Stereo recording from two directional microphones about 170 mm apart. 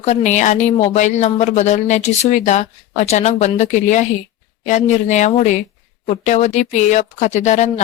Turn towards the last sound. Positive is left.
turn(degrees=45)  # may be behind; listen again after turning